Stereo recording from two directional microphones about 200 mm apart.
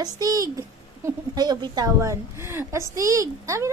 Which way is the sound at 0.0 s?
20° right (ahead or behind).